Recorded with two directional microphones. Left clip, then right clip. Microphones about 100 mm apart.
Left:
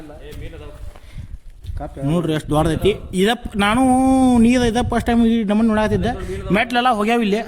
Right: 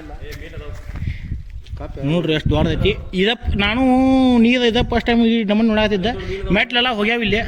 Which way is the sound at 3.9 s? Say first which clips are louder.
Even; 40° left (ahead or behind).